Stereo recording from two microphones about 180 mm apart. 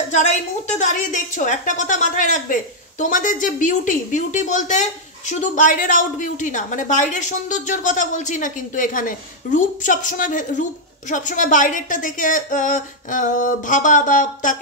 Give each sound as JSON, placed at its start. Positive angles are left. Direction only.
{"t": 0.1, "sound": "a woman's voice", "side_deg": 40}